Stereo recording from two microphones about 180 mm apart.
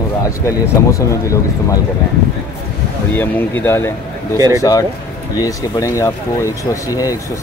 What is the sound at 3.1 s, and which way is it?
Speech, 10° left (ahead or behind).